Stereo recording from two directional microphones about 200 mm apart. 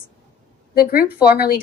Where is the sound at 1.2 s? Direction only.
50° left (ahead or behind).